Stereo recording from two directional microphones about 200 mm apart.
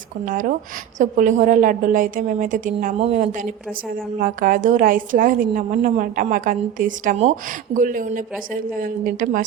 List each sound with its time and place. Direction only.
0.3 s a woman's voice: 45° right (ahead or behind)
4.2 s a woman's voice: 45° right (ahead or behind)